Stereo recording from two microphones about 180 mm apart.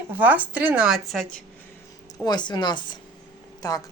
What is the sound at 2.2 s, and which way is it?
Speech, 25° left (ahead or behind).